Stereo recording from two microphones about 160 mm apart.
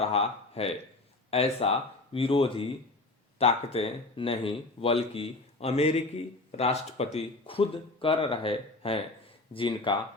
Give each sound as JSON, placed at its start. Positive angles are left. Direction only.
{"t": 0.0, "sound": "speech", "side_deg": 40}